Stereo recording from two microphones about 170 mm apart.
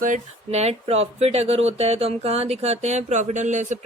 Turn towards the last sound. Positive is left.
turn(degrees=-45)  # may be behind; listen again after turning